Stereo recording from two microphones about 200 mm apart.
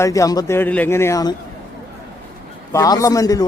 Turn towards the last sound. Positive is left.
turn(degrees=15)  # may be behind; listen again after turning